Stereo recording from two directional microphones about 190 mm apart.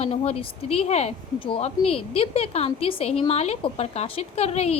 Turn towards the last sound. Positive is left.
turn(degrees=35)  # may be behind; listen again after turning